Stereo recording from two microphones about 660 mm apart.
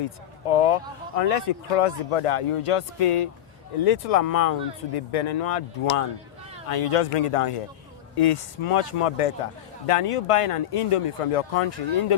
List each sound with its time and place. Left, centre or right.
0.5 s a man's voice: left